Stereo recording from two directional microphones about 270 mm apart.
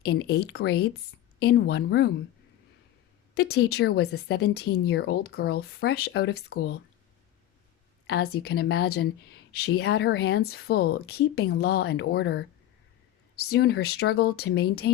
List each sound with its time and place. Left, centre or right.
0.0 s speech: left
3.3 s speech: left
8.0 s speech: left